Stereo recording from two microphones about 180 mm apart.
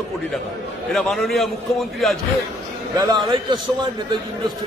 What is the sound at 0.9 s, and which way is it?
A man's voice, centre (ahead or behind).